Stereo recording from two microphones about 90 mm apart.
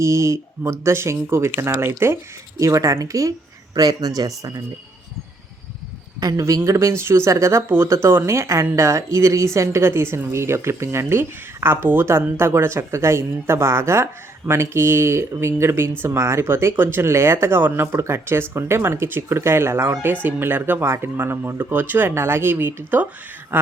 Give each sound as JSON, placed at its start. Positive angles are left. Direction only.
{"t": 0.0, "sound": "speech", "side_deg": -30}
{"t": 6.1, "sound": "speech", "side_deg": -45}
{"t": 6.4, "sound": "speech", "side_deg": -30}